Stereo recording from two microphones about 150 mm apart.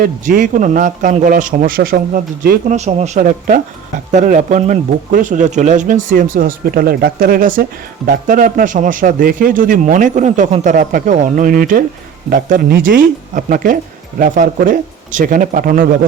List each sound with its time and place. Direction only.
0.0 s speech: 65° right (ahead or behind)
2.7 s speech: 50° right (ahead or behind); by 16.0 s 70° right (ahead or behind)